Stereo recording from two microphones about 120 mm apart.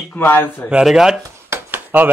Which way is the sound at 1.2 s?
20° right (ahead or behind).